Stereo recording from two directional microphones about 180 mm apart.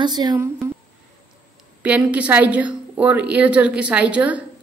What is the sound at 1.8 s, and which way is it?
Speech, 5° right (ahead or behind).